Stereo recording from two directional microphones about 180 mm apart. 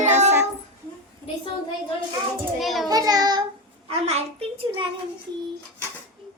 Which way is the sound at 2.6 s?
Centre (ahead or behind).